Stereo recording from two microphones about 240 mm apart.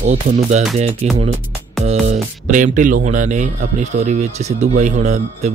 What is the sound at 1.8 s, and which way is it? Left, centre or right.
Speech, right.